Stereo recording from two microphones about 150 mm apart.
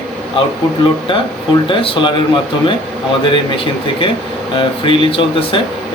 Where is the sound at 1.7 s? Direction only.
35° left (ahead or behind).